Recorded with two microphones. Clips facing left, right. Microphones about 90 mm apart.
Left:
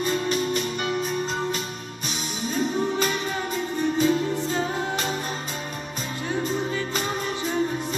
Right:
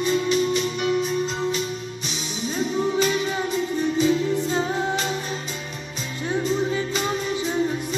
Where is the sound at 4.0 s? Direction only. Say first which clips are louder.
Right 1 dB; 45° left (ahead or behind).